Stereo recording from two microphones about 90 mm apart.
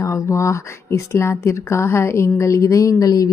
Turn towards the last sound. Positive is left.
turn(degrees=45)  # may be behind; listen again after turning